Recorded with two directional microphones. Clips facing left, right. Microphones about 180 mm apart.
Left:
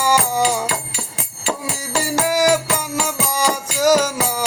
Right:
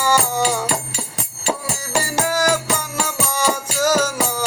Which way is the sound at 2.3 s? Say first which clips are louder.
Left 4 dB; 15° left (ahead or behind).